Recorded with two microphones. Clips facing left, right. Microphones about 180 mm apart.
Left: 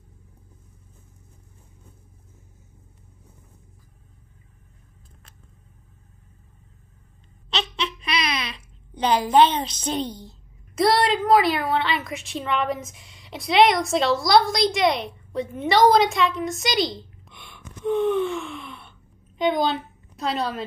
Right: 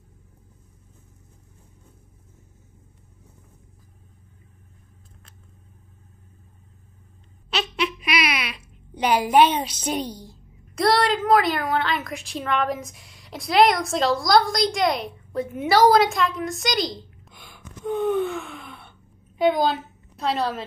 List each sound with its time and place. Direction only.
7.4 s a sound: 10° right (ahead or behind)
10.7 s a woman's voice: centre (ahead or behind)
17.8 s gasp: 55° right (ahead or behind)
19.3 s a woman's voice: 5° right (ahead or behind)